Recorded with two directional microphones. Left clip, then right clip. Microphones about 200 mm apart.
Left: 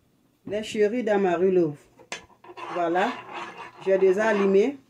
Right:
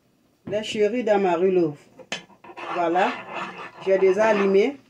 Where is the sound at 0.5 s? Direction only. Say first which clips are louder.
Right 2 dB; 10° left (ahead or behind).